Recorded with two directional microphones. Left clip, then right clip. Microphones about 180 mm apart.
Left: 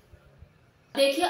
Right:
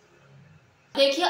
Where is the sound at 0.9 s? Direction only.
15° left (ahead or behind).